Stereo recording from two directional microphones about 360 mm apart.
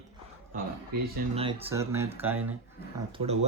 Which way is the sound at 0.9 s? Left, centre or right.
Right.